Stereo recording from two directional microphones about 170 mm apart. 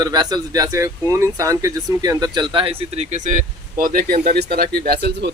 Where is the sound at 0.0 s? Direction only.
25° right (ahead or behind).